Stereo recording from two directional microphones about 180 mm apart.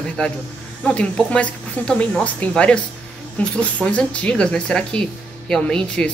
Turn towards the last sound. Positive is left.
turn(degrees=5)  # may be behind; listen again after turning